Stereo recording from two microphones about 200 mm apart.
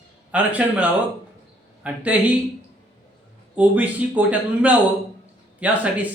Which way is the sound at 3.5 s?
5° right (ahead or behind).